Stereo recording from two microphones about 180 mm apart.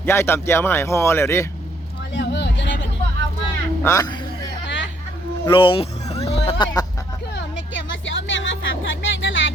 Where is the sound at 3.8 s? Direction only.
15° left (ahead or behind).